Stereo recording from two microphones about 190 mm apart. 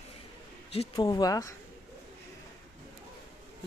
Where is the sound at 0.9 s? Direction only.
15° left (ahead or behind).